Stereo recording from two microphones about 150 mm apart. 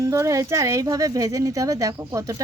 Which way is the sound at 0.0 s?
20° right (ahead or behind).